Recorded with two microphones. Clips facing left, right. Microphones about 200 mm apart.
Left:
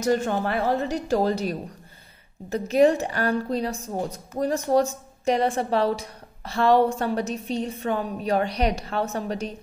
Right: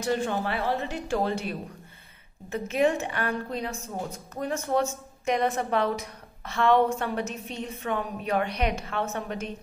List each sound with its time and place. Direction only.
0.0 s a woman's voice: 45° left (ahead or behind)